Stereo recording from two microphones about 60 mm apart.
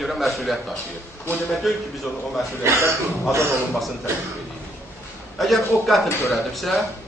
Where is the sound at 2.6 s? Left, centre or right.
Right.